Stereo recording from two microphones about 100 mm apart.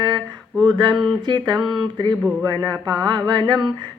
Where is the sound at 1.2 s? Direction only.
45° right (ahead or behind).